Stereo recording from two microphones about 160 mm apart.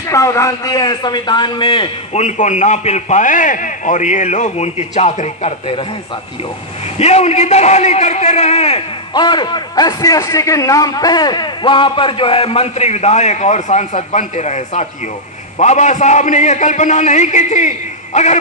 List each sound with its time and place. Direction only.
0.1 s a man's voice: 20° left (ahead or behind); by 5.5 s 45° left (ahead or behind)
7.0 s a man's voice: 40° left (ahead or behind)